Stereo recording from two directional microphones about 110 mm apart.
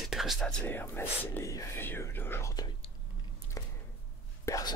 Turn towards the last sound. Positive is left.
turn(degrees=35)  # may be behind; listen again after turning